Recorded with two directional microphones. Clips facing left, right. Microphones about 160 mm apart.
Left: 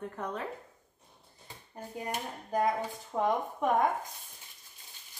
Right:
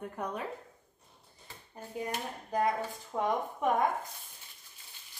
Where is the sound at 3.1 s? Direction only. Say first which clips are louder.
Left 2 dB; 5° left (ahead or behind).